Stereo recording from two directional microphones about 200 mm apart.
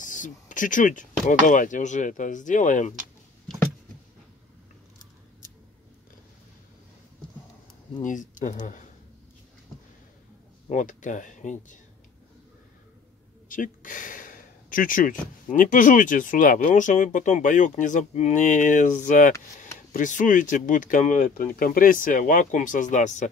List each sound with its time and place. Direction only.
0.0 s speech: 40° left (ahead or behind)
8.0 s speech: 40° left (ahead or behind)
10.7 s speech: 40° left (ahead or behind)
13.5 s speech: 40° left (ahead or behind)